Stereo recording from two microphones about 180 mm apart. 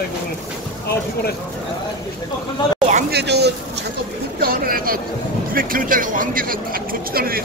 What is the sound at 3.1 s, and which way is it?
Speech, 65° right (ahead or behind).